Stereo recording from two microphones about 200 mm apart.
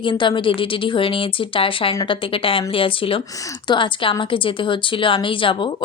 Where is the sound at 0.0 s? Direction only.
25° left (ahead or behind).